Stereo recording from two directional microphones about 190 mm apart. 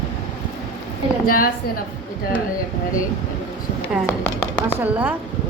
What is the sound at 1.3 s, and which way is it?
Speech, 50° left (ahead or behind).